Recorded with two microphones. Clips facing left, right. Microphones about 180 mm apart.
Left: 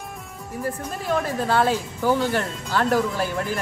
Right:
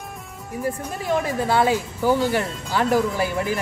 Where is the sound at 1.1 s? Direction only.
10° right (ahead or behind).